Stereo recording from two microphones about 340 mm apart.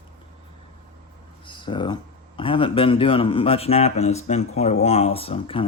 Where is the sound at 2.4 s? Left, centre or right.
Centre.